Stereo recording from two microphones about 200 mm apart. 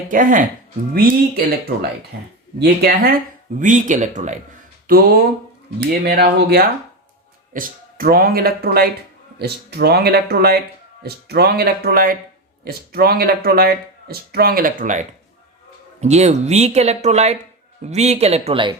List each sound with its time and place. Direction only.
0.1 s speech: 40° right (ahead or behind)
3.6 s speech: 40° right (ahead or behind)
4.9 s speech: 45° right (ahead or behind); by 18.8 s 25° right (ahead or behind)